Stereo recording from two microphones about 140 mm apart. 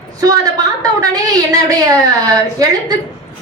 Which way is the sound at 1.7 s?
25° right (ahead or behind).